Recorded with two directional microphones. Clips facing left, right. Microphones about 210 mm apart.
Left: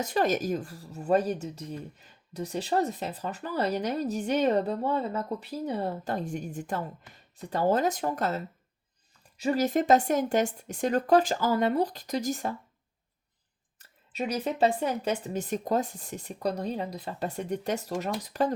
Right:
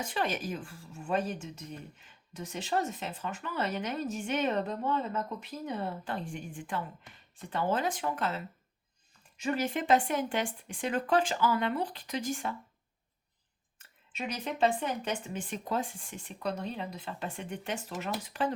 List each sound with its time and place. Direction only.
0.0 s speech: 40° left (ahead or behind)
13.7 s speech: 35° left (ahead or behind)